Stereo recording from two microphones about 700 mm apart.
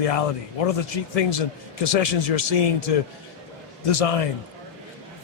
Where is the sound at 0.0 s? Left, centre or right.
Left.